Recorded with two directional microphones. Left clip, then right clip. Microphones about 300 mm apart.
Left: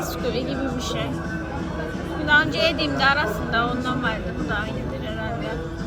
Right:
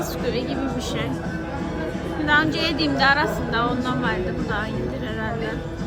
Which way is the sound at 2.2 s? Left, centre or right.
Centre.